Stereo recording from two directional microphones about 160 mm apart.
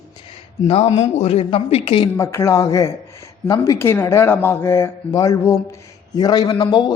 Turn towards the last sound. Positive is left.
turn(degrees=30)  # may be behind; listen again after turning